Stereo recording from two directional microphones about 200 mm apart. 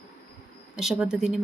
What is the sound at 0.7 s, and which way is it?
Speech, 5° right (ahead or behind).